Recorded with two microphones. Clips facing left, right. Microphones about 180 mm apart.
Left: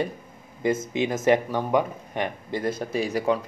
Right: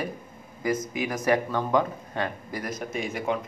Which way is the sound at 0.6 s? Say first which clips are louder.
Left 3 dB; 25° left (ahead or behind).